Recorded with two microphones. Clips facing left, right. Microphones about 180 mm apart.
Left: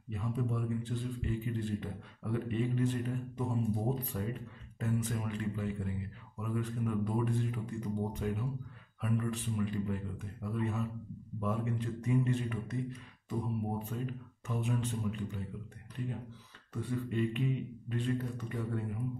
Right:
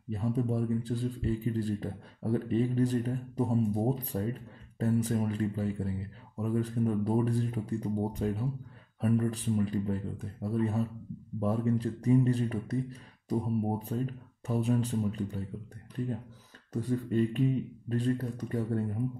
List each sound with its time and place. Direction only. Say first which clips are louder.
0.1 s speech: right 6 dB; 35° right (ahead or behind)
16.7 s speech: right 6 dB; 40° right (ahead or behind)